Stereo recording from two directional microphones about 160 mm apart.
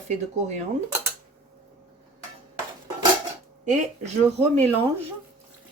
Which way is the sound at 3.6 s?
45° right (ahead or behind).